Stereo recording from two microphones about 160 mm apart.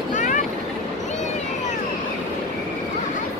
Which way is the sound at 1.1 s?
45° left (ahead or behind).